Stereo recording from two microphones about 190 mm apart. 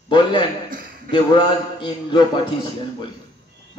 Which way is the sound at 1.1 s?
25° left (ahead or behind).